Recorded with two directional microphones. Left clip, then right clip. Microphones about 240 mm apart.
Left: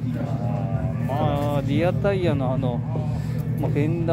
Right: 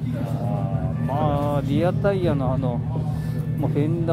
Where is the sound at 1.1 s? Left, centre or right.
Centre.